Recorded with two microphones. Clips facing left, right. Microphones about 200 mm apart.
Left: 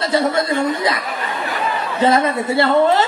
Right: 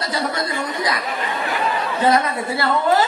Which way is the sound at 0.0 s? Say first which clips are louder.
Left 6 dB; 25° left (ahead or behind).